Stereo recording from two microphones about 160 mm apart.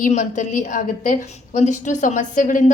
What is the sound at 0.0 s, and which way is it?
A woman's voice, 50° left (ahead or behind).